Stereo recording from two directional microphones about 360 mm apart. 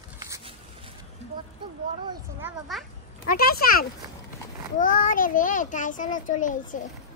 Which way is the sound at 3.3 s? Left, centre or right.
Left.